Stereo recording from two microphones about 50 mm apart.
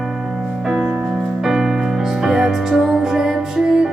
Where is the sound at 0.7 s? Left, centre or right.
Centre.